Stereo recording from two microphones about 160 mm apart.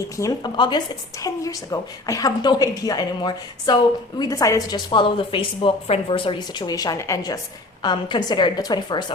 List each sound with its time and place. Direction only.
0.2 s a woman's voice: 25° left (ahead or behind)